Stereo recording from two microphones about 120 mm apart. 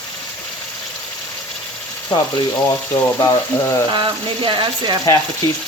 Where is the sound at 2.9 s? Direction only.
25° left (ahead or behind).